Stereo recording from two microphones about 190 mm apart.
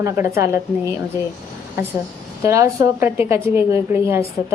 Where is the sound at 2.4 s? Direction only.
15° right (ahead or behind).